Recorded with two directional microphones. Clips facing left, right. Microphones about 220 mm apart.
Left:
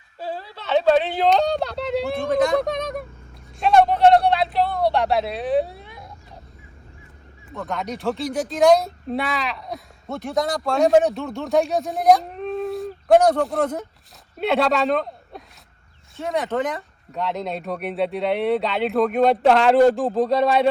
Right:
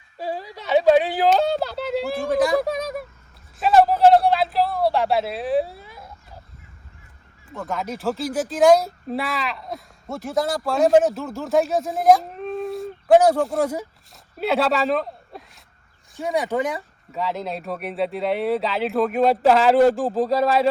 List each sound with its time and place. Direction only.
0.2 s speech: 15° right (ahead or behind)
3.6 s a sound: 5° right (ahead or behind)
7.5 s speech: centre (ahead or behind)